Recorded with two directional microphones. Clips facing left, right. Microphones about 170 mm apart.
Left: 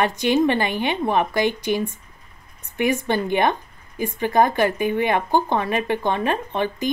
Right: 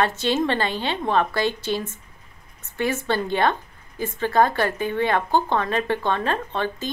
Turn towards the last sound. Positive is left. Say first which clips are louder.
# left 3 dB
turn(degrees=15)  # may be behind; listen again after turning